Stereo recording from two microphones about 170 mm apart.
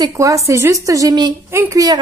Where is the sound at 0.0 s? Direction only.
20° right (ahead or behind).